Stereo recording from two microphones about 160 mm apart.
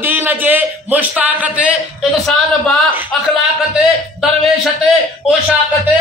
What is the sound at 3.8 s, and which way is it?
A man's voice, 5° right (ahead or behind).